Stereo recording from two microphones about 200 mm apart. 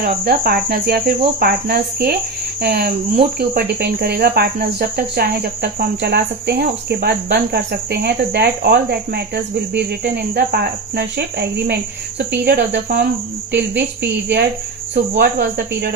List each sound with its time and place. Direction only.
0.0 s cricket: 50° right (ahead or behind)
13.5 s a woman's voice: 60° right (ahead or behind)
15.2 s cricket: 50° right (ahead or behind)